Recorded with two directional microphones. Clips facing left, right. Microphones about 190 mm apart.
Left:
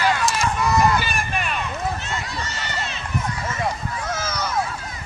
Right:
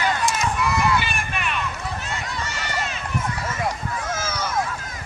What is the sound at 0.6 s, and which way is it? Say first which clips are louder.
Run: left 4 dB; 40° left (ahead or behind).